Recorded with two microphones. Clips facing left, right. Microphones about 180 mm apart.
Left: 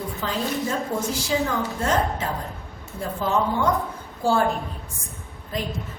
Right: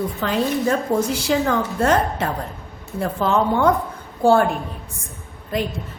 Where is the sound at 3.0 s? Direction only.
70° right (ahead or behind).